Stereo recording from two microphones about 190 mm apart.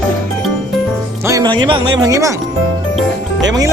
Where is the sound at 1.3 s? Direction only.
20° right (ahead or behind).